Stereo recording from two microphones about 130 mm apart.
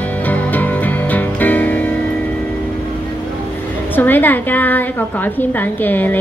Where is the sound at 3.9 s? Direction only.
15° left (ahead or behind).